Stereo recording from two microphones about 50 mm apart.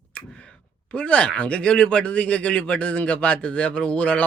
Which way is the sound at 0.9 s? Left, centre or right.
Left.